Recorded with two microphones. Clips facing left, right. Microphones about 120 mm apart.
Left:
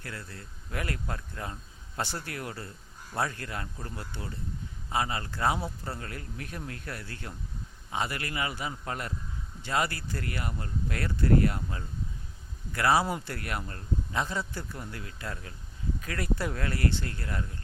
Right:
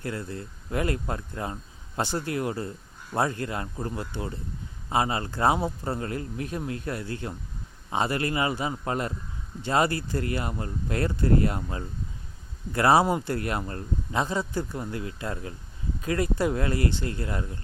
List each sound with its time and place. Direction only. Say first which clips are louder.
0.0 s a man's voice: right 9 dB; 25° right (ahead or behind)